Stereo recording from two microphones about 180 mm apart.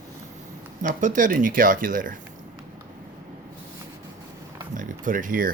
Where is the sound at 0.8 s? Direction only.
45° right (ahead or behind).